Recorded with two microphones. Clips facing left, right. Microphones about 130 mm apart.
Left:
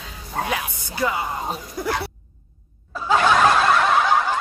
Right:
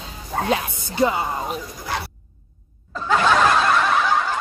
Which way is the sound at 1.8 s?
60° left (ahead or behind).